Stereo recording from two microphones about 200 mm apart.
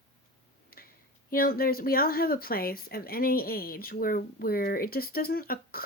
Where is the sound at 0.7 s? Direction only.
50° left (ahead or behind).